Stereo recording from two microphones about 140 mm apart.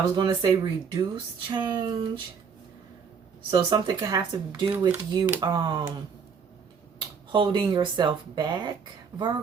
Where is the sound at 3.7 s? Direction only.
25° right (ahead or behind).